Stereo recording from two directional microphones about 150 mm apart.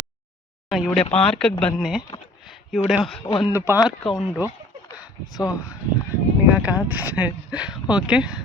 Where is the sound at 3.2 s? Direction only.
35° left (ahead or behind).